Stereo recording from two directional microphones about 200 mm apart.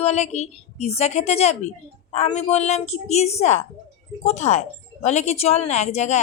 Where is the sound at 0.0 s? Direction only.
35° left (ahead or behind).